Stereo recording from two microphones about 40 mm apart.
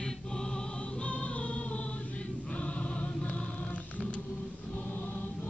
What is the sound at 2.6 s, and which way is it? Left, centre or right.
Choir, left.